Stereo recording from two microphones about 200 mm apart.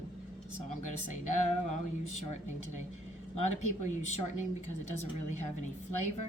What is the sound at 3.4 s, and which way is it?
Speech, 35° left (ahead or behind).